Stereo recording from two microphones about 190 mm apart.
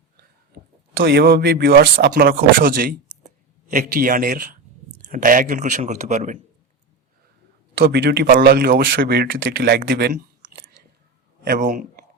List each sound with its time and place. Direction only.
0.9 s speech: 60° right (ahead or behind)
3.2 s a sound: 45° right (ahead or behind)
5.0 s speech: 45° right (ahead or behind)
7.8 s a man's voice: 60° right (ahead or behind); by 12.0 s 45° right (ahead or behind)